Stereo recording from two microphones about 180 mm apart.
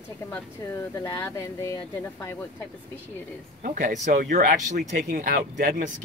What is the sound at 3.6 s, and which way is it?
Speech, 45° right (ahead or behind).